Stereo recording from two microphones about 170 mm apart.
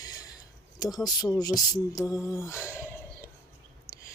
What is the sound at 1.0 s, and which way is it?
Speech, 20° left (ahead or behind).